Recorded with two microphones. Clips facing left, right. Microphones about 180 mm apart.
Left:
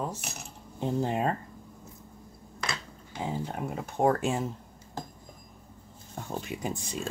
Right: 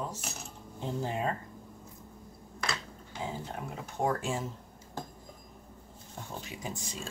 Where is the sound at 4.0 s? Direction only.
60° left (ahead or behind).